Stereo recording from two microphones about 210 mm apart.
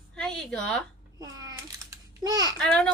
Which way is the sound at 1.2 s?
15° right (ahead or behind).